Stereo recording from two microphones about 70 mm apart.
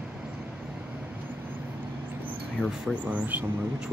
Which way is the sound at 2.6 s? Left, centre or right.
Left.